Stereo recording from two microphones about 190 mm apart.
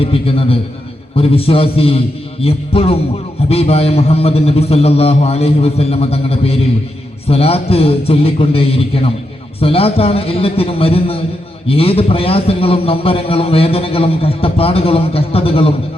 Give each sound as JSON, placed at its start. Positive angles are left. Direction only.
{"t": 0.0, "sound": "a man's voice", "side_deg": 30}